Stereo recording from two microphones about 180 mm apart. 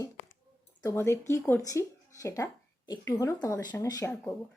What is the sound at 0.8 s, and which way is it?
A woman's voice, 15° left (ahead or behind).